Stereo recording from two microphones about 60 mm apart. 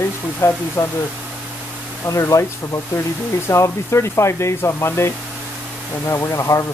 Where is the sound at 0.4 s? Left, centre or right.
Left.